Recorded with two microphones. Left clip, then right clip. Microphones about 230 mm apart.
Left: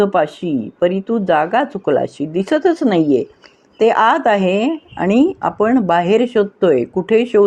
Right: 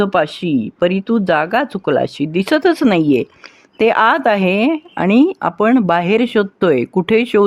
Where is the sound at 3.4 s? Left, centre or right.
Right.